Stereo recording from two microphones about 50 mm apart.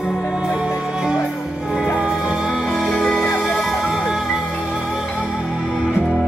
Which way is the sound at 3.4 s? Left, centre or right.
Centre.